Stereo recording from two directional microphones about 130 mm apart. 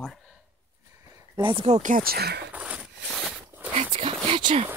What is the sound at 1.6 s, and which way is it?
Speech, 70° right (ahead or behind).